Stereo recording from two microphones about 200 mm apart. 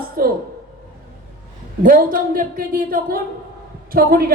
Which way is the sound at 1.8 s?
45° right (ahead or behind).